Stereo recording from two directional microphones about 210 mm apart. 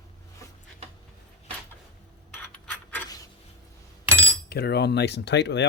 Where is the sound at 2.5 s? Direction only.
5° left (ahead or behind).